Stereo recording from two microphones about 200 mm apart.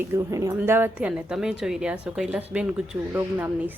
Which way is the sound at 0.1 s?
15° right (ahead or behind).